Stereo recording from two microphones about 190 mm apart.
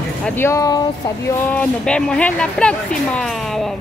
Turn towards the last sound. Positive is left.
turn(degrees=0)  # may be behind; listen again after turning